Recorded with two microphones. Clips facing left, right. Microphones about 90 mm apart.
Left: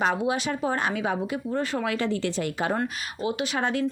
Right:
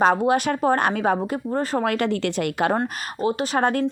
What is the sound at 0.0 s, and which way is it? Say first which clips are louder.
A woman's voice: right 6 dB; 50° right (ahead or behind).